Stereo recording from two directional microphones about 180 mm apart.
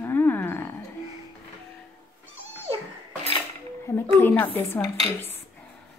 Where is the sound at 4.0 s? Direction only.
10° left (ahead or behind).